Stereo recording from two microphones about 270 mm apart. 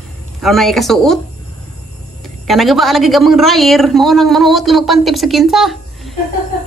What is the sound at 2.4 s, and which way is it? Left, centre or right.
A man's voice, centre.